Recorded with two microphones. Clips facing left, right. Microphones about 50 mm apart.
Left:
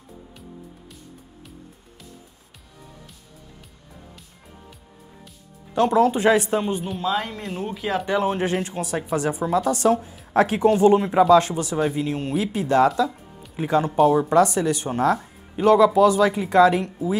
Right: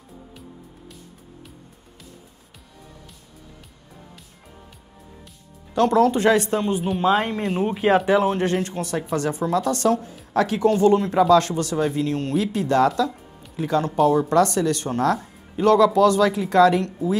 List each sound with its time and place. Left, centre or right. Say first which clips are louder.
5.8 s speech: right 1 dB; centre
7.0 s speech: right 8 dB; right
7.4 s speech: right 6 dB; centre
7.7 s speech: right 8 dB; right
8.0 s speech: right 3 dB; centre
10.3 s speech: left 1 dB; left; by 13.5 s centre
13.6 s speech: left 1 dB; centre